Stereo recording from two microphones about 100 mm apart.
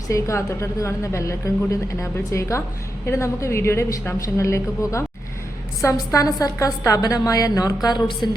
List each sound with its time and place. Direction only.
0.1 s a woman's voice: 30° left (ahead or behind); by 8.4 s 45° left (ahead or behind)